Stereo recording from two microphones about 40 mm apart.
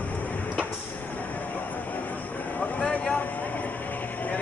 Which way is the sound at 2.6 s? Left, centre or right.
Left.